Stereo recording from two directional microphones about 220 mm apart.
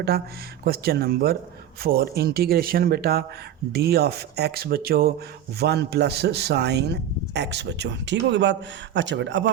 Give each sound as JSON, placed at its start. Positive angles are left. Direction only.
{"t": 0.6, "sound": "speech", "side_deg": -45}